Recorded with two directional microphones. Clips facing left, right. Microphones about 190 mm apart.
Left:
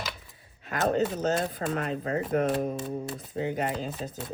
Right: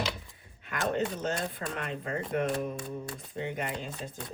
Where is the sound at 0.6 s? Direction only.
35° left (ahead or behind).